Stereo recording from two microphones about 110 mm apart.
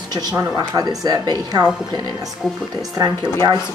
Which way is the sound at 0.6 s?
40° right (ahead or behind).